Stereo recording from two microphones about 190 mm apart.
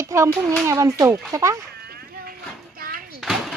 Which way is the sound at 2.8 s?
50° right (ahead or behind).